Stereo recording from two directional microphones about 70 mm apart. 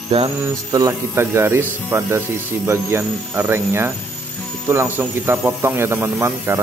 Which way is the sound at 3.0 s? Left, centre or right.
Right.